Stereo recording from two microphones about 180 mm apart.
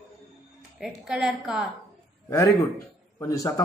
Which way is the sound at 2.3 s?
20° left (ahead or behind).